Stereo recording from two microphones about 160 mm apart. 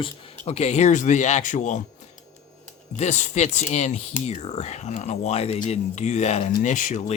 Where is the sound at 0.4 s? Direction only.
40° left (ahead or behind).